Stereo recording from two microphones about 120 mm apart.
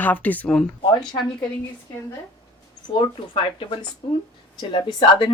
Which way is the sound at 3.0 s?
45° left (ahead or behind).